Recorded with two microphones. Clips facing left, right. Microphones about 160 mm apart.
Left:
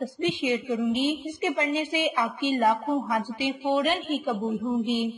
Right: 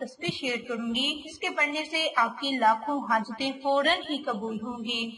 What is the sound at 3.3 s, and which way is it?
A woman's voice, 15° left (ahead or behind).